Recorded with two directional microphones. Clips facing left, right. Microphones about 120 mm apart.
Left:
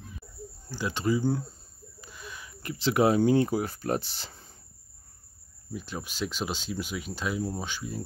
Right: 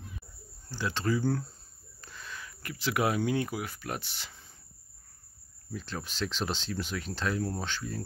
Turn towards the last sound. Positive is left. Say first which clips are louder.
# left 1 dB
turn(degrees=10)  # may be behind; listen again after turning